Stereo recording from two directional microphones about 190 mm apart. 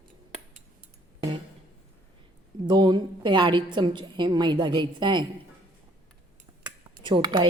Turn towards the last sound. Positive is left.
turn(degrees=-25)  # may be behind; listen again after turning